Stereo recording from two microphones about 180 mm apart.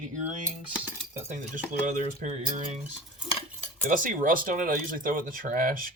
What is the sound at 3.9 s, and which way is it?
Speech, 45° right (ahead or behind).